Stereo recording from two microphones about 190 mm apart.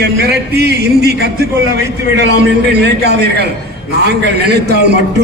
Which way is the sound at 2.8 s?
60° right (ahead or behind).